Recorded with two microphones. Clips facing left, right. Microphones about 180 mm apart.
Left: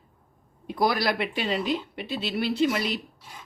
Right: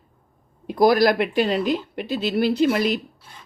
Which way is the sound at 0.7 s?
45° right (ahead or behind).